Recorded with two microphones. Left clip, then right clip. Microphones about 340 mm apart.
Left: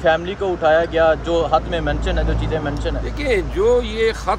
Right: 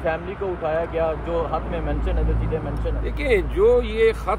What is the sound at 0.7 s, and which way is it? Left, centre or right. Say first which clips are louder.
Speech: left 9 dB; left.